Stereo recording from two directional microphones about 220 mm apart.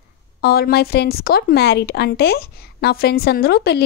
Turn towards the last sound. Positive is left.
turn(degrees=45)  # may be behind; listen again after turning